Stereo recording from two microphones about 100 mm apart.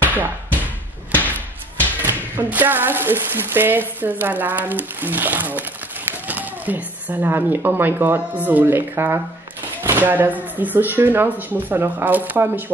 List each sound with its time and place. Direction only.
0.0 s bouncing: 20° right (ahead or behind)
2.0 s speech: 20° right (ahead or behind)